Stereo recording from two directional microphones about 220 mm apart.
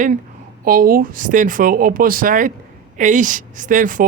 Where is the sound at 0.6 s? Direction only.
40° right (ahead or behind).